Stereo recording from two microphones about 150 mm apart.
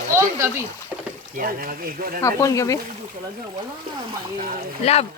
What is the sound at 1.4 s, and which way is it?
Speech, 75° right (ahead or behind).